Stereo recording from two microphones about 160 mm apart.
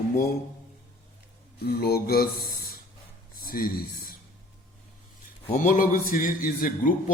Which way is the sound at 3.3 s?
65° left (ahead or behind).